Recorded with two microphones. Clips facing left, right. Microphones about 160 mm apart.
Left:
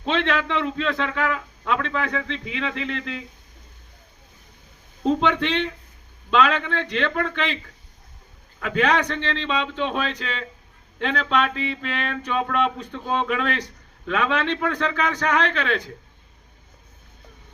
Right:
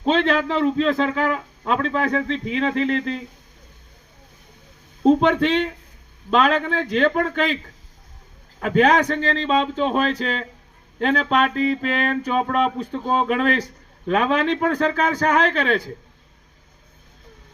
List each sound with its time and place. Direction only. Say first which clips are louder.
0.0 s a man's voice: right 4 dB; 40° right (ahead or behind)
5.0 s a man's voice: right 5 dB; 40° right (ahead or behind)
6.3 s a sound: right 2 dB; 40° right (ahead or behind)
8.5 s a man's voice: right 5 dB; 40° right (ahead or behind)
11.0 s a sound: right 4 dB; 45° right (ahead or behind)
14.1 s a man's voice: right 4 dB; 40° right (ahead or behind)